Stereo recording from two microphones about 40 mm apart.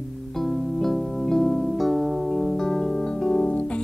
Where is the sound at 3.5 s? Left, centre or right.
Left.